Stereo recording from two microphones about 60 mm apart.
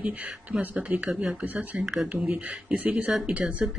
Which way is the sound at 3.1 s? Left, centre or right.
Centre.